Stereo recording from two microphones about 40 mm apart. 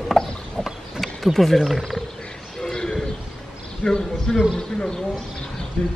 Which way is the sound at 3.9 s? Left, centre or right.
Centre.